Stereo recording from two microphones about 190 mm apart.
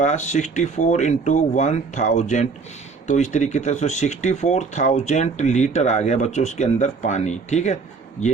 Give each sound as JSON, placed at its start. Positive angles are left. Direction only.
{"t": 0.0, "sound": "speech", "side_deg": 40}